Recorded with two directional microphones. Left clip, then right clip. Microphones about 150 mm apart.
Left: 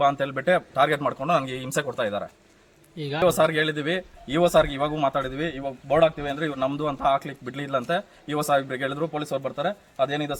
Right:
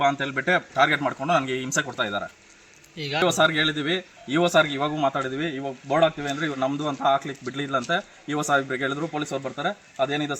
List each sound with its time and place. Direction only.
0.0 s a man's voice: 35° left (ahead or behind)
3.2 s a man's voice: 30° left (ahead or behind)